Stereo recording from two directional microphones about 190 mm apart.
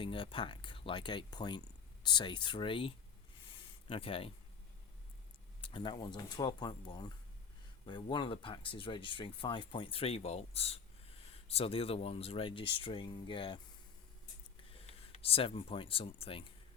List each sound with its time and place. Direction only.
0.0 s speech: 25° left (ahead or behind)
3.4 s a sound: 30° left (ahead or behind)
5.6 s speech: 25° left (ahead or behind)
14.7 s speech: 30° left (ahead or behind)